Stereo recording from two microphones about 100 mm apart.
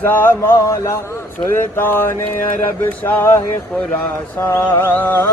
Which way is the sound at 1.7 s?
20° left (ahead or behind).